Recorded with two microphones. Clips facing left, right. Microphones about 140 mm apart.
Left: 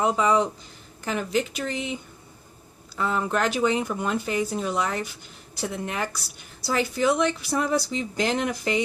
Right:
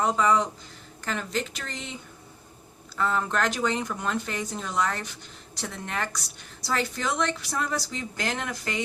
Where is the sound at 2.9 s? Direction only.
15° left (ahead or behind).